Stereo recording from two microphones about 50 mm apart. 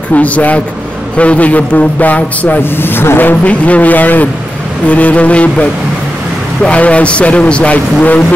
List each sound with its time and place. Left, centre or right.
0.1 s a man's voice: left
2.8 s a man's voice: left